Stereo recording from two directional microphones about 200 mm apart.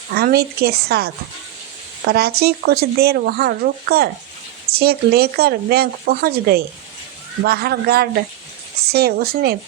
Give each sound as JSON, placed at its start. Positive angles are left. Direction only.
{"t": 0.1, "sound": "speech", "side_deg": -50}